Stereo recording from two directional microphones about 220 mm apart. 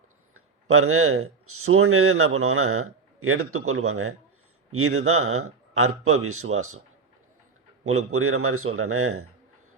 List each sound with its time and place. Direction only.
0.3 s speech: 75° right (ahead or behind)
7.9 s speech: 75° right (ahead or behind)